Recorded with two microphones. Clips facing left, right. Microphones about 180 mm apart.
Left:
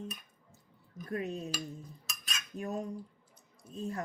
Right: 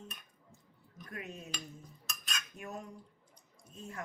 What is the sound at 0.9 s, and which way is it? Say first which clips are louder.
Dishes: left 9 dB; 35° left (ahead or behind).